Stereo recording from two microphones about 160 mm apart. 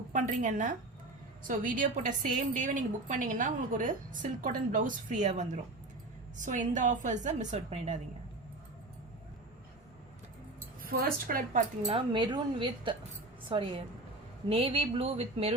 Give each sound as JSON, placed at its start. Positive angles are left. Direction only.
{"t": 0.1, "sound": "a woman's voice", "side_deg": -50}
{"t": 10.8, "sound": "a woman's voice", "side_deg": -65}
{"t": 11.8, "sound": "speech", "side_deg": -30}